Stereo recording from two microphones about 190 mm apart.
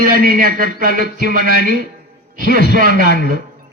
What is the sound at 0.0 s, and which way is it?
A man's voice, 45° right (ahead or behind).